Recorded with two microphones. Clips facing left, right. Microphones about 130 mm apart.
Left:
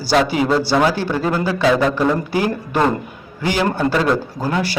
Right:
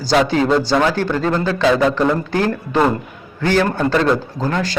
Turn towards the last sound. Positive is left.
turn(degrees=10)  # may be behind; listen again after turning